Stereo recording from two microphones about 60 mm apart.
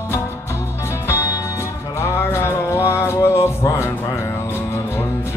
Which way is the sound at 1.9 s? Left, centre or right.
Left.